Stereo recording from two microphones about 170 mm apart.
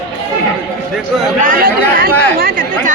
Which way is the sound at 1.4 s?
55° right (ahead or behind).